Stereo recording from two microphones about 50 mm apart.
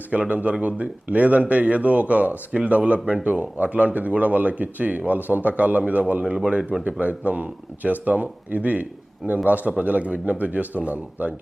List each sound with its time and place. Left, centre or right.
0.1 s speech: right
6.2 s speech: centre
7.0 s speech: right